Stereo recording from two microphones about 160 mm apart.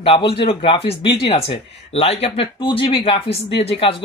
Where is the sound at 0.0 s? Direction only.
35° left (ahead or behind).